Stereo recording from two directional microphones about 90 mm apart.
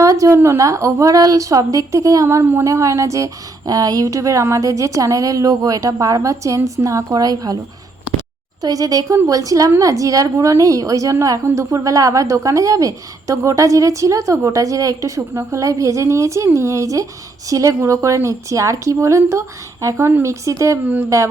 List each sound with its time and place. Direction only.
0.0 s a sound: 35° right (ahead or behind)
0.3 s a woman's voice: 30° right (ahead or behind)
8.6 s a woman's voice: 40° right (ahead or behind)